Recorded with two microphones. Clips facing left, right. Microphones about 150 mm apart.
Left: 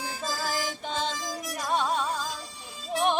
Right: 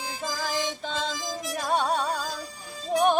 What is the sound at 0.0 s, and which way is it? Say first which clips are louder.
Music: even; 15° right (ahead or behind).